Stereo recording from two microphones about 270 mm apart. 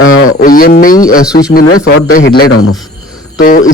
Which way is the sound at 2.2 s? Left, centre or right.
Left.